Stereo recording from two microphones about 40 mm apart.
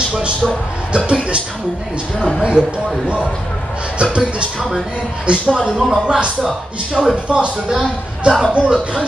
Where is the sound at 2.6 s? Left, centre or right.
Right.